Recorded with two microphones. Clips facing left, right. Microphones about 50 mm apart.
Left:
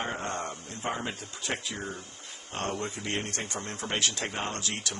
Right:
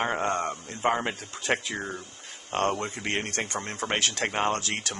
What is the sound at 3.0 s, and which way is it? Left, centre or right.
A man's voice, right.